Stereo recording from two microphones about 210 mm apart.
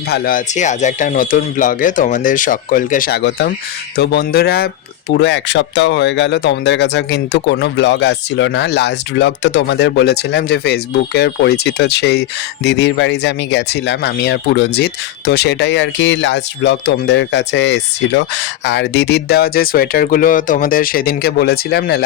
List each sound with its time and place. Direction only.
0.1 s speech: 40° left (ahead or behind)